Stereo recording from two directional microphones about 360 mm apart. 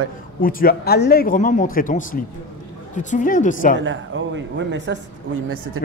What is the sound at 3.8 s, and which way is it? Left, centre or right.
Speech, right.